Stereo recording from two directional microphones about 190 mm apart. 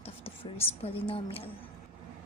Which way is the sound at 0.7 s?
30° left (ahead or behind).